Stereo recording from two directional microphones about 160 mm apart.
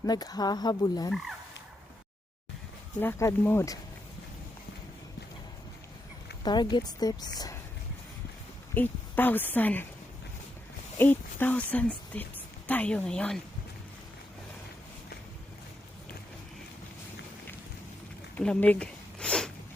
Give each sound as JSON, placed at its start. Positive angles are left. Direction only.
{"t": 0.0, "sound": "speech", "side_deg": 25}
{"t": 3.0, "sound": "speech", "side_deg": 15}
{"t": 6.4, "sound": "speech", "side_deg": 25}
{"t": 8.7, "sound": "speech", "side_deg": 10}
{"t": 10.9, "sound": "a woman's voice", "side_deg": 10}
{"t": 18.3, "sound": "a sound", "side_deg": 5}